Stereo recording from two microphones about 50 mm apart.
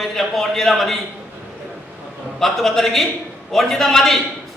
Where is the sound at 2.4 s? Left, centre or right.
Centre.